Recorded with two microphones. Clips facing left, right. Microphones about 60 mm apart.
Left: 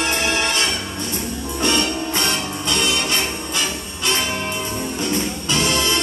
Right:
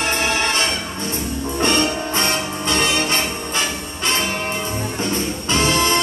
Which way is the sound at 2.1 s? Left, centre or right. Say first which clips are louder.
Right 2 dB; right.